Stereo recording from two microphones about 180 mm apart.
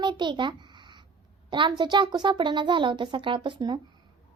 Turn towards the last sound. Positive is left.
turn(degrees=-25)  # may be behind; listen again after turning